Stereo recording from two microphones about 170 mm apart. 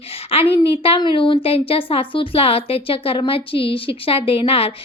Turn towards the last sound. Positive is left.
turn(degrees=35)  # may be behind; listen again after turning